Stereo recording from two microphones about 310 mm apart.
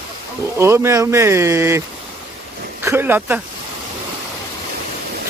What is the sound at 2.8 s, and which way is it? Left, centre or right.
Speech, centre.